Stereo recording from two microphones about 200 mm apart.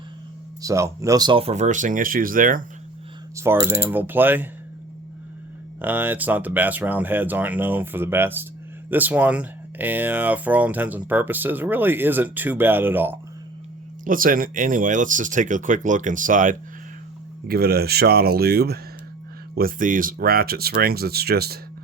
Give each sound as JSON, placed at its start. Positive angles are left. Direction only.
{"t": 0.6, "sound": "speech", "side_deg": -15}
{"t": 3.3, "sound": "speech", "side_deg": -15}
{"t": 5.8, "sound": "speech", "side_deg": -10}
{"t": 14.0, "sound": "speech", "side_deg": -45}
{"t": 17.5, "sound": "speech", "side_deg": -50}